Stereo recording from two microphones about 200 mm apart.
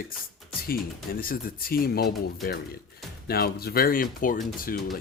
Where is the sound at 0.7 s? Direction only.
45° left (ahead or behind).